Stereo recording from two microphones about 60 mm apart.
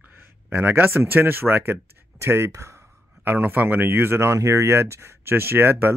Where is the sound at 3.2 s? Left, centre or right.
Right.